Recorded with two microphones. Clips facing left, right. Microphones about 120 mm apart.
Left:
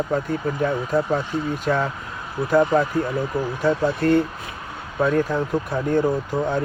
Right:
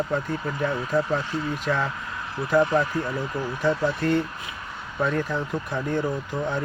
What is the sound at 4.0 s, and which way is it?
Speech, 45° left (ahead or behind).